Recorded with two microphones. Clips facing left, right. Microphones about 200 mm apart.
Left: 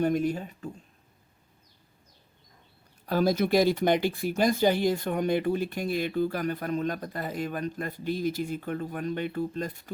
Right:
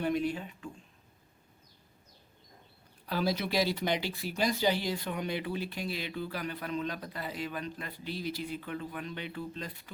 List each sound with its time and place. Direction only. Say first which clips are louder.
0.0 s speech: left 5 dB; 45° left (ahead or behind)
3.1 s speech: left 8 dB; 45° left (ahead or behind)